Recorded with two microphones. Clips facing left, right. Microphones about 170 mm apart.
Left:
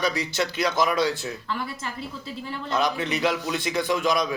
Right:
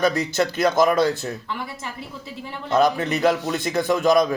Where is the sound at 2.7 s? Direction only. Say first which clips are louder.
Right 6 dB; 50° right (ahead or behind).